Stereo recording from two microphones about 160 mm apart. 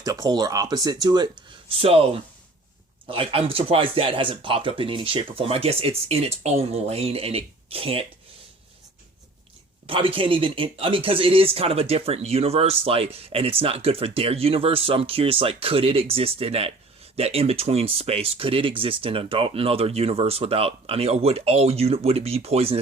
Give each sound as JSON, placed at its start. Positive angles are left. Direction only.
{"t": 0.0, "sound": "speech", "side_deg": -25}
{"t": 3.1, "sound": "speech", "side_deg": -35}
{"t": 9.8, "sound": "speech", "side_deg": -35}